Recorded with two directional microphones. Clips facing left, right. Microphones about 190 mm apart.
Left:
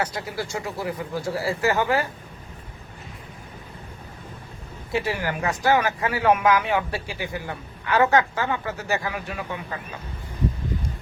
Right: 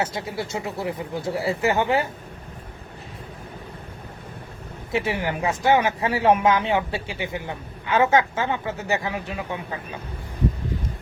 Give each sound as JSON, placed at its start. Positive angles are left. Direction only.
{"t": 0.0, "sound": "speech", "side_deg": -25}
{"t": 4.9, "sound": "speech", "side_deg": -20}